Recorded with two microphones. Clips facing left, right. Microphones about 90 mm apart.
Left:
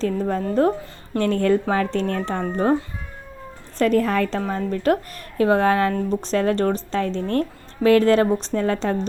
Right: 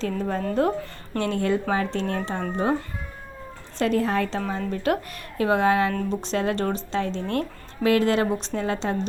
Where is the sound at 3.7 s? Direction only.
50° left (ahead or behind).